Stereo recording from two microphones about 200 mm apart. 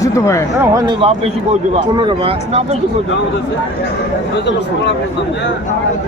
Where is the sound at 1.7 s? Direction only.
25° right (ahead or behind).